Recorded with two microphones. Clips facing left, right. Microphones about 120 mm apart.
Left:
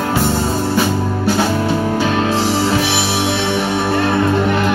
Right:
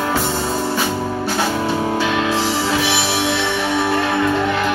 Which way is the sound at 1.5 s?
Centre (ahead or behind).